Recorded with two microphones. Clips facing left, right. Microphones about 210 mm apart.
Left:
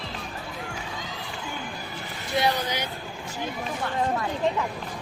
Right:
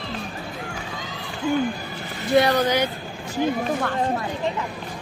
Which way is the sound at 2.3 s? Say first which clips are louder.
Right 8 dB; 65° right (ahead or behind).